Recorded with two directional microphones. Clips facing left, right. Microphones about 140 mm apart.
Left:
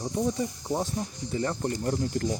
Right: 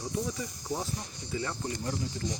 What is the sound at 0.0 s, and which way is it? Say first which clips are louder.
Speech: left 6 dB; 25° left (ahead or behind).